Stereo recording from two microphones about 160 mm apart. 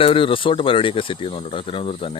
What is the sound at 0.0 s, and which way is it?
Speech, 35° left (ahead or behind).